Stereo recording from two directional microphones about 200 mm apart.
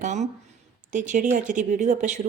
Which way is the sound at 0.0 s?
35° right (ahead or behind).